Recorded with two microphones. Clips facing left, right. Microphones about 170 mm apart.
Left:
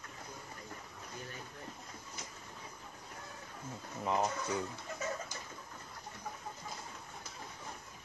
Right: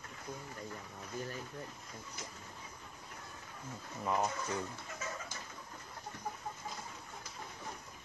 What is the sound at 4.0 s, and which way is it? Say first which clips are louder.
Speech: left 1 dB; 15° left (ahead or behind).